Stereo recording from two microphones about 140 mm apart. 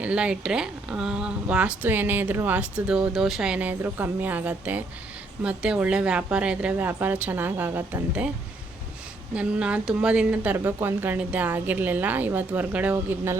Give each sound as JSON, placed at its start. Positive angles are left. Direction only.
{"t": 0.0, "sound": "a woman's voice", "side_deg": -10}
{"t": 9.3, "sound": "a woman's voice", "side_deg": -10}